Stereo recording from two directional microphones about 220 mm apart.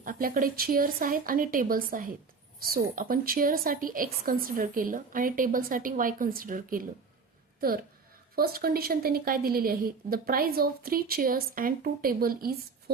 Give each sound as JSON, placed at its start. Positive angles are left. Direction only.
{"t": 0.0, "sound": "a woman's voice", "side_deg": -40}
{"t": 8.4, "sound": "a woman's voice", "side_deg": -45}